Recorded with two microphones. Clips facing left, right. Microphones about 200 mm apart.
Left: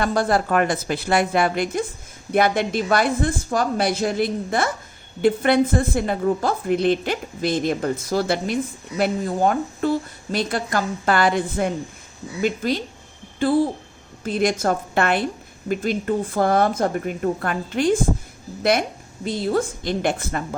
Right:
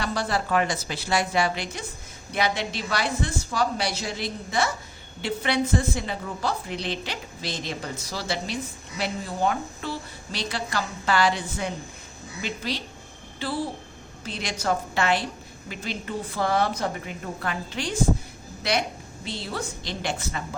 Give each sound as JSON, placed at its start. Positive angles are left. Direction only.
{"t": 0.0, "sound": "a woman's voice", "side_deg": 50}